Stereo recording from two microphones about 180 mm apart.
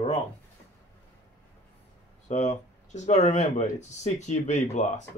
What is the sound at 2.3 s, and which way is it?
Speech, 40° left (ahead or behind).